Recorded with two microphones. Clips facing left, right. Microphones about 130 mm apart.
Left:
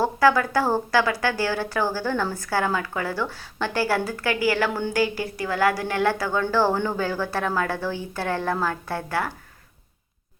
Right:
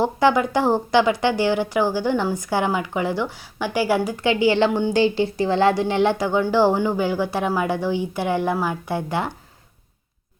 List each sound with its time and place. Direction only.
0.0 s a woman's voice: 20° right (ahead or behind)